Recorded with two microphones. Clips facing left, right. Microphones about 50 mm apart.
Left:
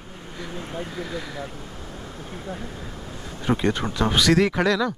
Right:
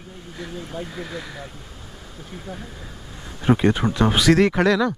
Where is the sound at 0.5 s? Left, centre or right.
Left.